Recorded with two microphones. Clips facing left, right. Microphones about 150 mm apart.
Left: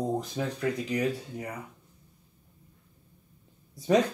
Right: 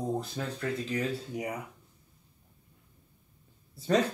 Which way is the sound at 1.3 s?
15° right (ahead or behind).